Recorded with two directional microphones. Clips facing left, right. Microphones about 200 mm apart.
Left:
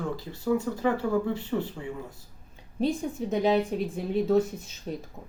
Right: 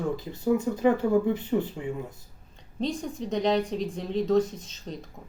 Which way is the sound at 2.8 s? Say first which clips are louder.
Left 3 dB; 10° left (ahead or behind).